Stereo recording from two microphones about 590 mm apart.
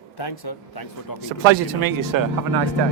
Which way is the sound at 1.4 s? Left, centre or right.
Right.